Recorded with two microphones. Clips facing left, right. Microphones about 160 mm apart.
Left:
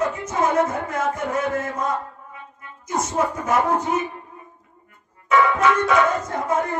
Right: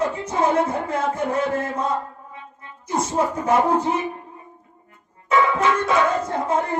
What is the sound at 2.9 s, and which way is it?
Speech, 30° right (ahead or behind).